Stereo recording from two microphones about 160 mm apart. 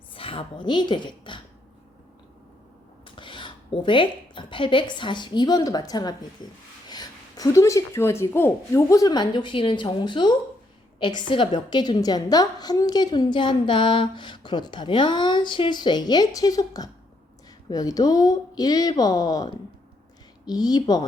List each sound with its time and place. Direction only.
0.1 s a woman's voice: 35° left (ahead or behind)
3.2 s a woman's voice: 30° left (ahead or behind)